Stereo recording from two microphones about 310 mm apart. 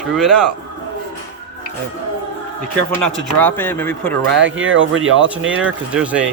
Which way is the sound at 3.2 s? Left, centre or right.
Centre.